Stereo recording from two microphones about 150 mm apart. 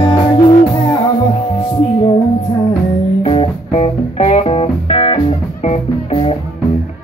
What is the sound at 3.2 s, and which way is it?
Music, 40° left (ahead or behind).